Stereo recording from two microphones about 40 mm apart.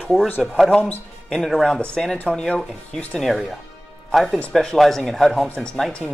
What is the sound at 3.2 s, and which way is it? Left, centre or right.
Speech, centre.